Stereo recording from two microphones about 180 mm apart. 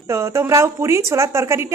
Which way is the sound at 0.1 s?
15° right (ahead or behind).